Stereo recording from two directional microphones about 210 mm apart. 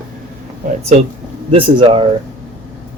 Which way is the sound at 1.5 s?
25° right (ahead or behind).